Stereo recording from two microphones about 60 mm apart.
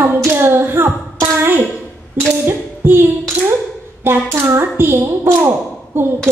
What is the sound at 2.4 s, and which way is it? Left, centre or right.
Music, right.